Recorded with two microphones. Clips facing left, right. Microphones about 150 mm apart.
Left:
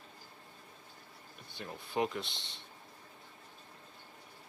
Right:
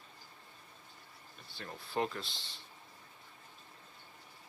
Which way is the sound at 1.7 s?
10° left (ahead or behind).